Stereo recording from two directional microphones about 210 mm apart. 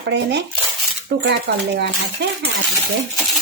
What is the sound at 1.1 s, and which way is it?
Cutlery, 55° right (ahead or behind).